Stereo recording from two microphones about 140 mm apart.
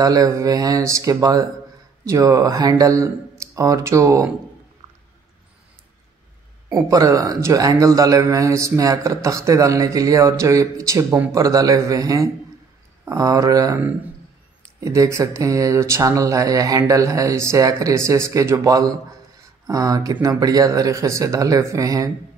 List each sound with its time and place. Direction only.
0.0 s a man's voice: 25° right (ahead or behind)
6.7 s a man's voice: 25° right (ahead or behind)
14.8 s a man's voice: 20° right (ahead or behind)